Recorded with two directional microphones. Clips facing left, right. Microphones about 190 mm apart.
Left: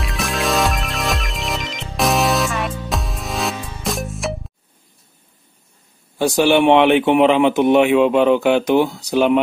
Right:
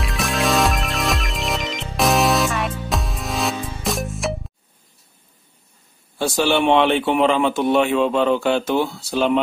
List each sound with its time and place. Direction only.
0.0 s music: centre (ahead or behind)
6.1 s a man's voice: 15° left (ahead or behind)